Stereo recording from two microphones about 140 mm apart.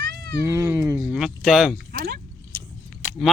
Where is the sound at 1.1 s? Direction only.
5° right (ahead or behind).